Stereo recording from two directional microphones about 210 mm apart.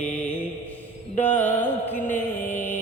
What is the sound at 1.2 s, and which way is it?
Mantra, 10° left (ahead or behind).